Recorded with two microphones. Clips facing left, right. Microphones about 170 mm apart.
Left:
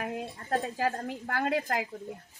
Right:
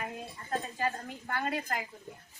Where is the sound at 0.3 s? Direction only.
70° left (ahead or behind).